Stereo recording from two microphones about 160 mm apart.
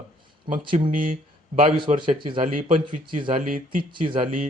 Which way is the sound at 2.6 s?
35° right (ahead or behind).